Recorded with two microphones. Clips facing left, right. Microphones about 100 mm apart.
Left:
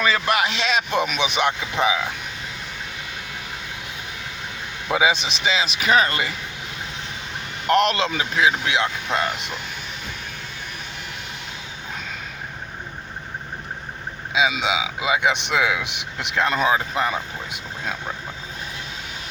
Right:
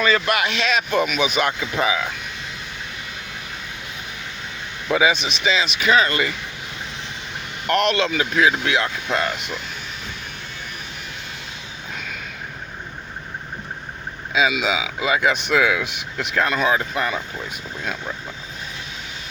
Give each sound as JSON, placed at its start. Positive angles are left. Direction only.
{"t": 0.3, "sound": "speech", "side_deg": 25}
{"t": 4.9, "sound": "speech", "side_deg": 20}
{"t": 5.1, "sound": "speech", "side_deg": 35}
{"t": 7.7, "sound": "speech", "side_deg": 30}
{"t": 14.5, "sound": "speech", "side_deg": 25}